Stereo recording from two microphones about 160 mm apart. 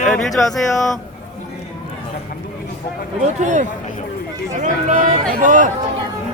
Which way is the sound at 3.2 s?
45° right (ahead or behind).